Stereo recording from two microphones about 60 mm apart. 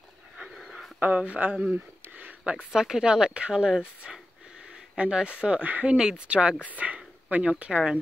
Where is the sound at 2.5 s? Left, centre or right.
Centre.